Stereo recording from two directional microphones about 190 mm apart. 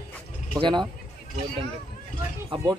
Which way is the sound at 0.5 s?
25° right (ahead or behind).